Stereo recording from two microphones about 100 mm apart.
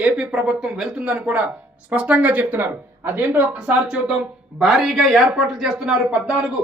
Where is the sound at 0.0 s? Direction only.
10° right (ahead or behind).